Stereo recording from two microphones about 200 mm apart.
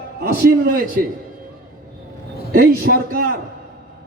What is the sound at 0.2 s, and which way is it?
Speech, 50° right (ahead or behind).